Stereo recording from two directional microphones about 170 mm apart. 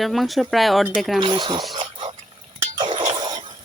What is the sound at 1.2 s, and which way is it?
Speech, 25° right (ahead or behind).